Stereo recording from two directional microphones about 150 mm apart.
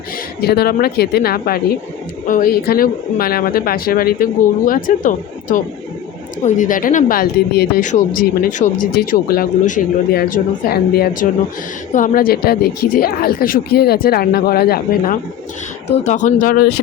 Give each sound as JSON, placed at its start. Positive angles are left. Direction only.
{"t": 0.4, "sound": "a woman's voice", "side_deg": 90}
{"t": 2.2, "sound": "speech", "side_deg": 65}
{"t": 7.9, "sound": "a woman's voice", "side_deg": 60}
{"t": 16.0, "sound": "speech", "side_deg": 55}